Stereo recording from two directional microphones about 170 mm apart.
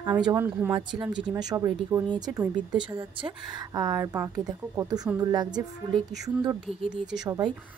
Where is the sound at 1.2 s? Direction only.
25° right (ahead or behind).